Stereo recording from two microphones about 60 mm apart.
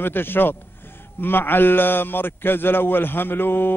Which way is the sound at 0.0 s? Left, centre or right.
Left.